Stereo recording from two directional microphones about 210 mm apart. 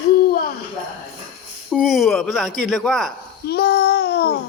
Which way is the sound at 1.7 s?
5° right (ahead or behind).